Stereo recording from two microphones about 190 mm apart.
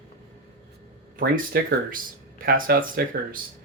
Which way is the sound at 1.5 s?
55° right (ahead or behind).